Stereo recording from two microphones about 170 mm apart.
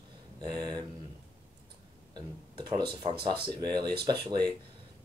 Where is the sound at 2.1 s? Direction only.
25° right (ahead or behind).